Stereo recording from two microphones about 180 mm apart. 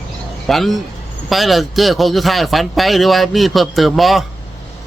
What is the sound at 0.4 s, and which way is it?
A man's voice, centre (ahead or behind).